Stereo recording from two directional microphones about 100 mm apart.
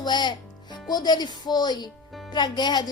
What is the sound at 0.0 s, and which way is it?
A woman's voice, 45° left (ahead or behind).